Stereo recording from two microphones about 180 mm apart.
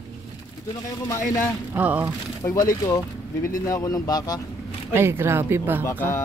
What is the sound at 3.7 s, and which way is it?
Speech, 20° left (ahead or behind).